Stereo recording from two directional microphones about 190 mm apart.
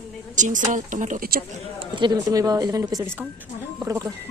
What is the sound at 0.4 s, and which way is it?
Speech, 40° right (ahead or behind).